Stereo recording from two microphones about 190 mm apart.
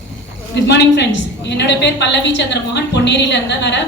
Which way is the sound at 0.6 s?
65° left (ahead or behind).